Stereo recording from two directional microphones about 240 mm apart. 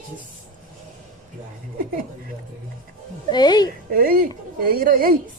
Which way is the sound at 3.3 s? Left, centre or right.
Centre.